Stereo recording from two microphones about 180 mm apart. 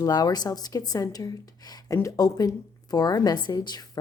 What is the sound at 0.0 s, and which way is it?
A woman's voice, 20° left (ahead or behind).